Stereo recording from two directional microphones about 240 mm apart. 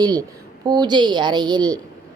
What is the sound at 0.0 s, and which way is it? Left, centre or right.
Speech, centre.